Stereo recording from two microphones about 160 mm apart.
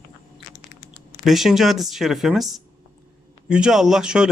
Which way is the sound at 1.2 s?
Centre (ahead or behind).